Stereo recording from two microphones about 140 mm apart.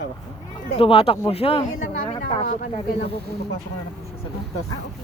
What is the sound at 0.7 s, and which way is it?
Speech, 40° left (ahead or behind).